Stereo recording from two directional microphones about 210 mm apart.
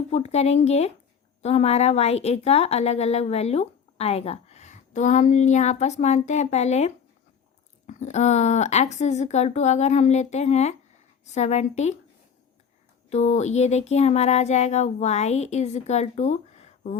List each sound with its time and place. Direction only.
0.1 s a woman's voice: 30° left (ahead or behind)
13.1 s a woman's voice: 30° left (ahead or behind)